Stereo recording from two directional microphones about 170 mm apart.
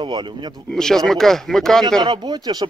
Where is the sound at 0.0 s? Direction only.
25° right (ahead or behind).